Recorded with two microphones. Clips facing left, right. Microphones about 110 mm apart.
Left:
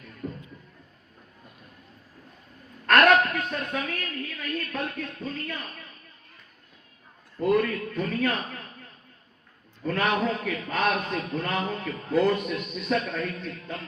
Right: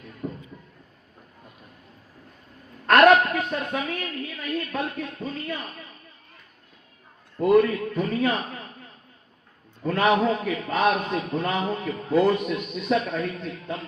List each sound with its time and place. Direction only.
2.8 s a woman's voice: 20° right (ahead or behind)
7.3 s a man's voice: 20° right (ahead or behind)
9.8 s a man's voice: 15° right (ahead or behind)